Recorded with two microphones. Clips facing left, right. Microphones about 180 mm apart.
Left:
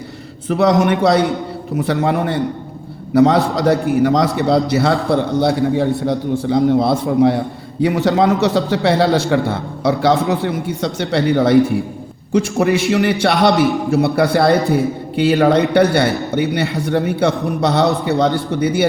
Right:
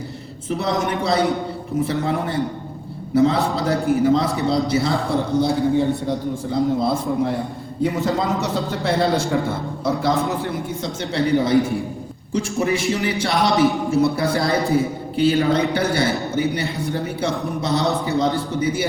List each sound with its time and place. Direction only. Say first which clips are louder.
0.4 s a man's voice: left 8 dB; 65° left (ahead or behind)
10.3 s a man's voice: left 5 dB; centre (ahead or behind)
11.1 s a man's voice: left 4 dB; 70° left (ahead or behind)